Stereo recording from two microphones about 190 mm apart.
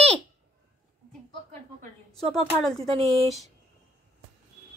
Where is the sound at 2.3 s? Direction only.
5° left (ahead or behind).